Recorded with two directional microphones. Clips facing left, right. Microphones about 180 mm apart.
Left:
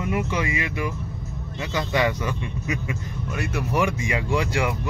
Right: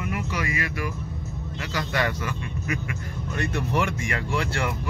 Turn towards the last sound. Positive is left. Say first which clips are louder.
# left 4 dB
turn(degrees=15)  # may be behind; listen again after turning